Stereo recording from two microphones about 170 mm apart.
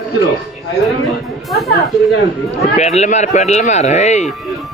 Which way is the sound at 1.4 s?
Centre (ahead or behind).